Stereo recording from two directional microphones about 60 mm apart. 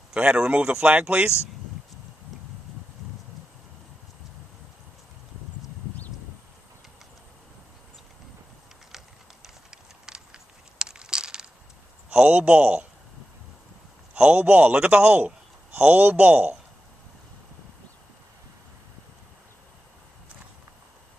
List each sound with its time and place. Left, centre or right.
0.1 s a man's voice: centre
8.9 s a sound: centre
12.1 s a man's voice: right
14.1 s a man's voice: centre